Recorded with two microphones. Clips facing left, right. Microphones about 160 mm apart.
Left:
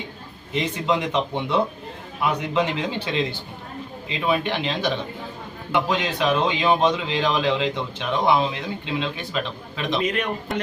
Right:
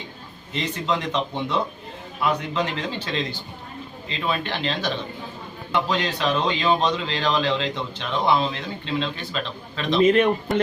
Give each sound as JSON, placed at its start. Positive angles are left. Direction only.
{"t": 0.5, "sound": "speech", "side_deg": 10}
{"t": 4.3, "sound": "speech", "side_deg": 15}
{"t": 10.0, "sound": "a man's voice", "side_deg": -30}